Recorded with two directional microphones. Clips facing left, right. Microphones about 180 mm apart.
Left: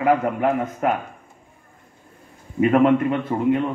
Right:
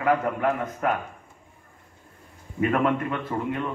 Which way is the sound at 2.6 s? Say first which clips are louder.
Left 7 dB; 20° left (ahead or behind).